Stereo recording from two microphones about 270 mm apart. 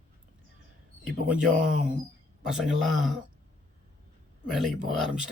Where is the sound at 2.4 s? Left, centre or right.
Centre.